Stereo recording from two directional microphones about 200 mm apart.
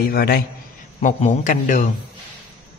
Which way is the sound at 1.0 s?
40° left (ahead or behind).